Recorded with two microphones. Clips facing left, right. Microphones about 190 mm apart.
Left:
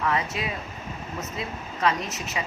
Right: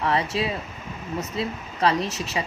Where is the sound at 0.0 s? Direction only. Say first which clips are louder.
Right 3 dB; 30° right (ahead or behind).